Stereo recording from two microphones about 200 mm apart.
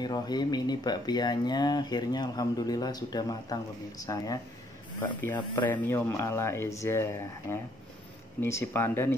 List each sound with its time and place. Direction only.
0.0 s speech: 20° left (ahead or behind)